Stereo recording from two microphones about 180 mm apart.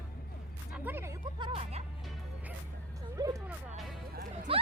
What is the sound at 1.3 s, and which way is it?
Music, 30° right (ahead or behind).